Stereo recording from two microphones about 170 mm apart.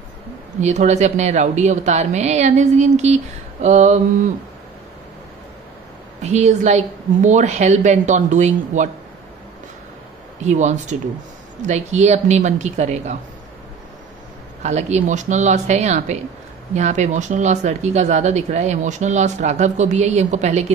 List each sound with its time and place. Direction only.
0.6 s speech: 40° right (ahead or behind)
6.2 s speech: 40° right (ahead or behind)
10.4 s speech: 45° right (ahead or behind)
14.6 s speech: 40° right (ahead or behind)